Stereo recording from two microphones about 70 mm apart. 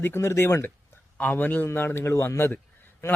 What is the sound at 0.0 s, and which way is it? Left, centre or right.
Speech, left.